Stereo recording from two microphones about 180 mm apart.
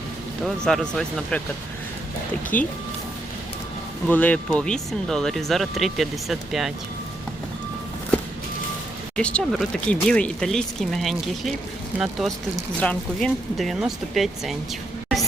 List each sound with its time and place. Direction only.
0.4 s speech: 5° left (ahead or behind)
2.5 s speech: 10° left (ahead or behind)
4.1 s speech: 10° left (ahead or behind)
9.1 s speech: 5° left (ahead or behind)
12.8 s speech: 5° left (ahead or behind)